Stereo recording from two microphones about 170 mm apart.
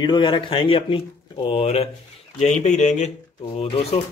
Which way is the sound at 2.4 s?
45° left (ahead or behind).